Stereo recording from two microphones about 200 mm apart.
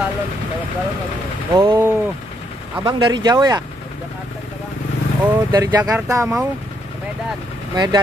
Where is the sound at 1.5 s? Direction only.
25° right (ahead or behind).